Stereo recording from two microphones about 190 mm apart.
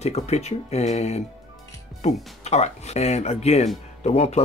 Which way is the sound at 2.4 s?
35° left (ahead or behind).